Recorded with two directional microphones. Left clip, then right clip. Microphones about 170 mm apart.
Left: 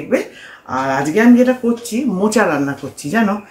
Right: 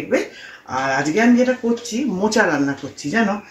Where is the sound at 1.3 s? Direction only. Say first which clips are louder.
Left 4 dB; 15° left (ahead or behind).